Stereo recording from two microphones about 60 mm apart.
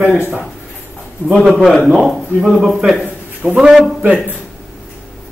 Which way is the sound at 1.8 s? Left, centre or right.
Centre.